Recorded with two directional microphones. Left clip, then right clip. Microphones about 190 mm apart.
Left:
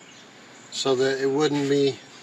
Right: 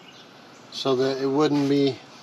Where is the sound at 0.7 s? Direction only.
30° right (ahead or behind).